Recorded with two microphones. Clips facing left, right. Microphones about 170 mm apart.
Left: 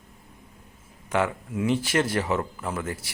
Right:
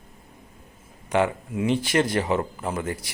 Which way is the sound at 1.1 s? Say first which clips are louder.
Right 3 dB; 15° right (ahead or behind).